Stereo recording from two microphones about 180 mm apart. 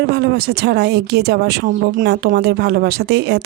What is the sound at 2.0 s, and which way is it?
A woman's voice, 65° right (ahead or behind).